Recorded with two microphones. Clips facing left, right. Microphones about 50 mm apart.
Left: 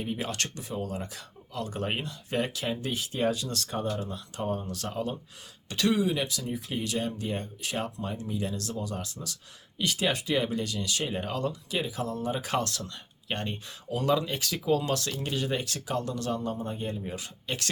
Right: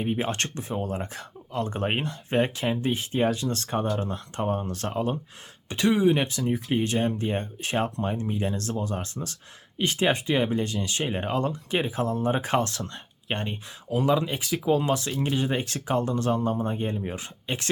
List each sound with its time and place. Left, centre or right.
0.0 s speech: right
5.6 s speech: right
13.5 s speech: centre